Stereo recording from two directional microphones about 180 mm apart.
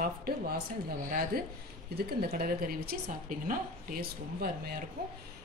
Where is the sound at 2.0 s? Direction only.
60° right (ahead or behind).